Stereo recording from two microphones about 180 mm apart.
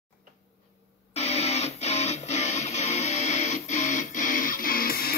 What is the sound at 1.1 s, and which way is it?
Music, 35° left (ahead or behind).